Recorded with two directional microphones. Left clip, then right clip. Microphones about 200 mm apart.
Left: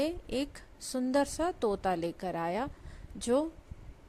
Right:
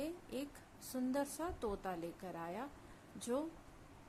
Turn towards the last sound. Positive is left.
turn(degrees=30)  # may be behind; listen again after turning